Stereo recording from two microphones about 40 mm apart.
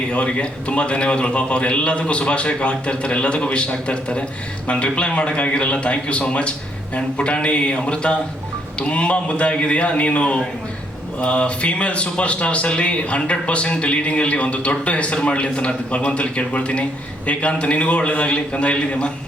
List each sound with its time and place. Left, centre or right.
0.1 s a man's voice: left